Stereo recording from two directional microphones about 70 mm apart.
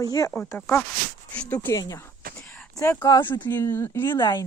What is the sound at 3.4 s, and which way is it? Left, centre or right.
Speech, left.